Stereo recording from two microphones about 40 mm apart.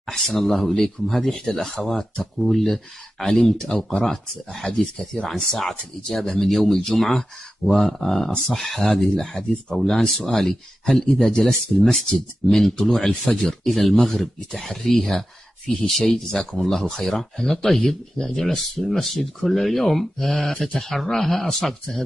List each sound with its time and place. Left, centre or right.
0.0 s speech: centre; by 4.0 s left
4.0 s speech: centre
4.6 s speech: centre
5.3 s speech: centre
9.2 s speech: centre
20.5 s speech: centre
20.8 s speech: centre